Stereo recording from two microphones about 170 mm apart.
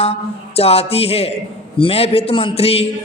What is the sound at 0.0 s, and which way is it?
A man's voice, 35° left (ahead or behind).